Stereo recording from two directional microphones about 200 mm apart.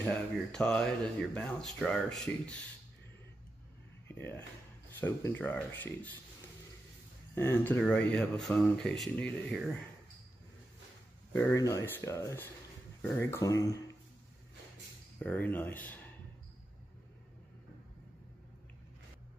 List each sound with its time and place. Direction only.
0.0 s speech: 5° left (ahead or behind)
4.1 s speech: 10° left (ahead or behind)
7.3 s speech: 10° left (ahead or behind)
11.3 s speech: 15° left (ahead or behind)
15.1 s speech: 10° left (ahead or behind)